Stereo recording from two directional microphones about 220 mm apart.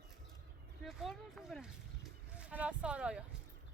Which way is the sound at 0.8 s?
Centre (ahead or behind).